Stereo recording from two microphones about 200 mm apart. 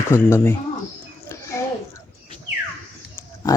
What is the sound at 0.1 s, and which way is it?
Speech, 10° left (ahead or behind).